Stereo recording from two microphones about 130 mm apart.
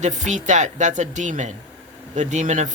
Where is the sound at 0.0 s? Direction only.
70° right (ahead or behind).